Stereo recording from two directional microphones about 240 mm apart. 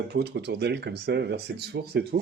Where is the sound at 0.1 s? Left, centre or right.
Right.